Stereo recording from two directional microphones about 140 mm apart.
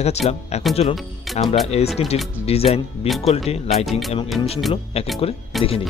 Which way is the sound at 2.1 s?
45° left (ahead or behind).